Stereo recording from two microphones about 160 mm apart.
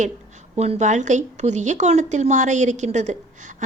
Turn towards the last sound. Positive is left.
turn(degrees=-45)  # may be behind; listen again after turning